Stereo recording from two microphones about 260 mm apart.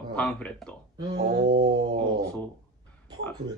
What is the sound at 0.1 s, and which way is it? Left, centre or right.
Speech, centre.